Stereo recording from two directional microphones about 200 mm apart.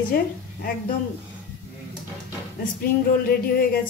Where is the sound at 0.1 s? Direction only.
45° left (ahead or behind).